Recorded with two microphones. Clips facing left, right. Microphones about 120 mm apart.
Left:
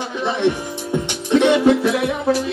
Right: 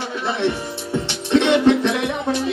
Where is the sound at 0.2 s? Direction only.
15° left (ahead or behind).